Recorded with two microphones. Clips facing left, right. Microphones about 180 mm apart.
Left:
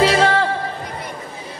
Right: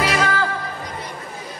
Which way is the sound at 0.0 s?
30° left (ahead or behind).